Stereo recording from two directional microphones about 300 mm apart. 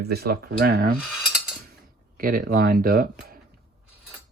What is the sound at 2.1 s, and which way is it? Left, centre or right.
Speech, right.